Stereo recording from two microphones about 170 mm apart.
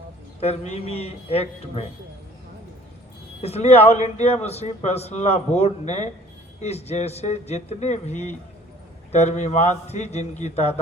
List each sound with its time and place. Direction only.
0.3 s a man's voice: 40° left (ahead or behind)
3.4 s a man's voice: 40° left (ahead or behind)